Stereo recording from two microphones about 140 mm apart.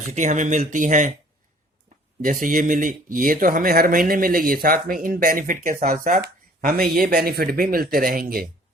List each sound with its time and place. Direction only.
0.0 s speech: 60° right (ahead or behind)
2.2 s speech: 70° right (ahead or behind); by 8.4 s 90° right